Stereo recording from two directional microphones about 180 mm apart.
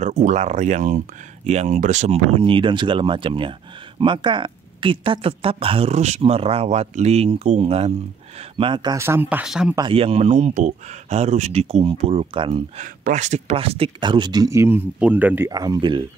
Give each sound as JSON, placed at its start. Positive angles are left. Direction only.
{"t": 0.0, "sound": "speech", "side_deg": -45}
{"t": 9.8, "sound": "speech", "side_deg": -30}
{"t": 12.8, "sound": "speech", "side_deg": -45}